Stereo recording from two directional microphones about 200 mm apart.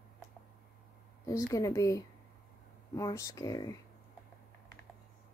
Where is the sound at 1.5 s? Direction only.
15° left (ahead or behind).